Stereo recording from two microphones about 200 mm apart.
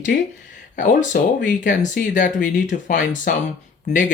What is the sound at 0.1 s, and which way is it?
Speech, 50° left (ahead or behind).